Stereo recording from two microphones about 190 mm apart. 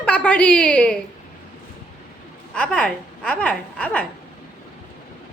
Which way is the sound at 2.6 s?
5° left (ahead or behind).